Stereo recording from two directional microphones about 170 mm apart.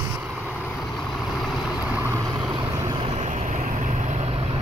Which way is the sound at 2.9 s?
40° right (ahead or behind).